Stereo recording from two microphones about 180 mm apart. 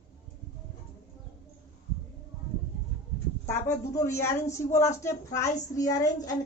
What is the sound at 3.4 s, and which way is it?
A woman's voice, 15° left (ahead or behind).